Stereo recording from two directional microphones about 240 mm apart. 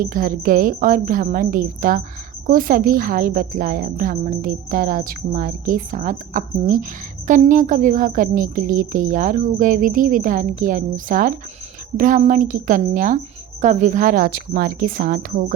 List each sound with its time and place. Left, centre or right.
0.0 s a woman's voice: right